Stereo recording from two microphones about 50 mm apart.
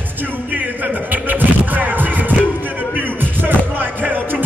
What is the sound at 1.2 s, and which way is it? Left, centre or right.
Music, right.